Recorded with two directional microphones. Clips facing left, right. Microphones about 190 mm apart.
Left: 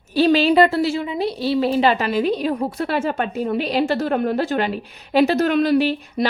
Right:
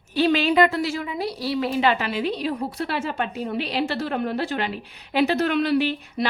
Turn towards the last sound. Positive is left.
turn(degrees=40)  # may be behind; listen again after turning